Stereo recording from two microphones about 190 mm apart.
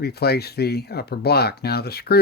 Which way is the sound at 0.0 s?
55° left (ahead or behind).